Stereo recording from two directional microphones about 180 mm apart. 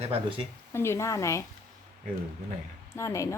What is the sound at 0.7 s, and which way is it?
Speech, 15° left (ahead or behind).